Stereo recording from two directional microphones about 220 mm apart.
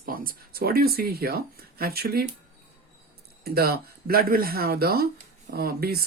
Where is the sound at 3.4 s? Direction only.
45° right (ahead or behind).